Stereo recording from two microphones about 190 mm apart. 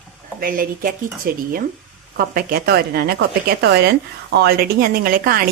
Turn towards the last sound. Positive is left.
turn(degrees=-50)  # may be behind; listen again after turning